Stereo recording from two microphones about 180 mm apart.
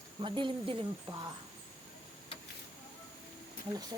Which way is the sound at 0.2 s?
25° right (ahead or behind).